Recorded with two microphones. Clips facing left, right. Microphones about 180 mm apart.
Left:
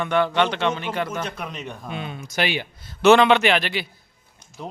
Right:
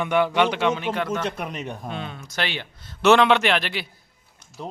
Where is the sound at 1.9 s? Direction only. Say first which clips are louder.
Left 2 dB; 10° left (ahead or behind).